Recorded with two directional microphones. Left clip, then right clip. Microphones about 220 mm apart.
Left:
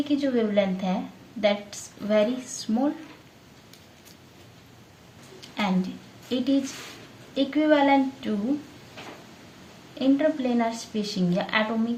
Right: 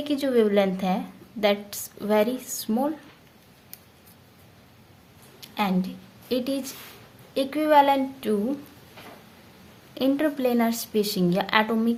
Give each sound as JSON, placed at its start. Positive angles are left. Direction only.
{"t": 0.0, "sound": "a woman's voice", "side_deg": -45}
{"t": 5.4, "sound": "a woman's voice", "side_deg": -35}
{"t": 10.0, "sound": "a woman's voice", "side_deg": -45}